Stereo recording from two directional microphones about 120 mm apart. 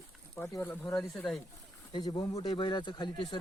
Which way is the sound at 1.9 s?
35° left (ahead or behind).